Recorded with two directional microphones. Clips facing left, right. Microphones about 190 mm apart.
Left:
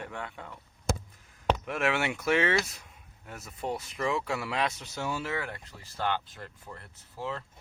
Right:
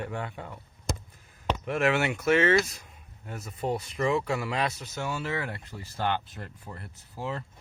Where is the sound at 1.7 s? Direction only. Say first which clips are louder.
Right 4 dB; centre (ahead or behind).